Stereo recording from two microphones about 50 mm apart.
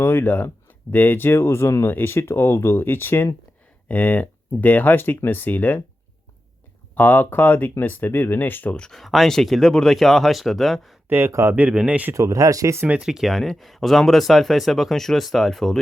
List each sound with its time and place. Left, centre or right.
0.0 s speech: left
1.9 s speech: left
3.8 s speech: left
6.9 s speech: left
8.7 s speech: centre
9.0 s speech: centre
11.4 s speech: right
11.9 s speech: right
12.1 s speech: right
12.9 s speech: centre